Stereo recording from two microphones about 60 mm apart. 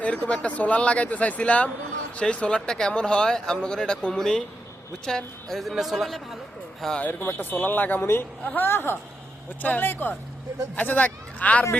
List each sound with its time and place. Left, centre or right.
0.0 s a sound: left
0.3 s speech: left; by 6.2 s centre
7.0 s speech: left
8.0 s a man's voice: left